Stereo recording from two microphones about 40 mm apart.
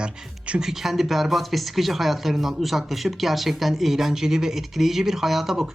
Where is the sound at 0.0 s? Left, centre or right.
Right.